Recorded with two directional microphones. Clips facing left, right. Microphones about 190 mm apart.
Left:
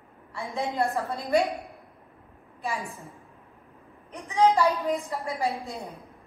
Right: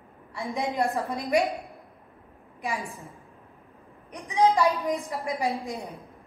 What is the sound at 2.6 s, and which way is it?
Speech, 15° right (ahead or behind).